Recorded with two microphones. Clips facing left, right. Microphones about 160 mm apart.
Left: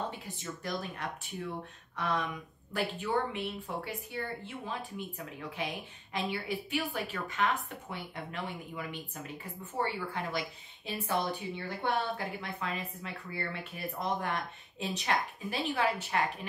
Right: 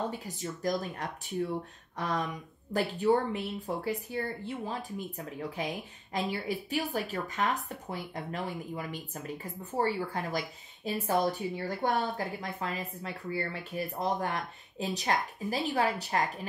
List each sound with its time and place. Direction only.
0.4 s speech: 40° right (ahead or behind)